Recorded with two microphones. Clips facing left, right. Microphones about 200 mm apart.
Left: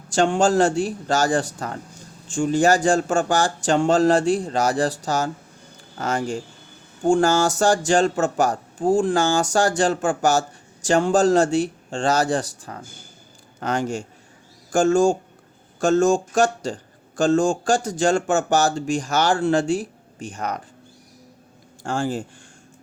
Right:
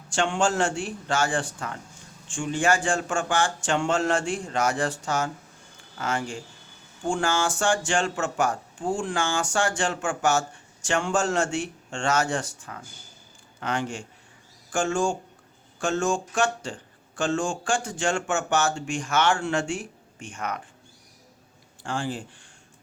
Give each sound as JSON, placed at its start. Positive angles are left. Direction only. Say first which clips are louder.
{"t": 0.1, "sound": "speech", "louder": "left 6 dB", "side_deg": 40}
{"t": 21.8, "sound": "speech", "louder": "left 6 dB", "side_deg": 45}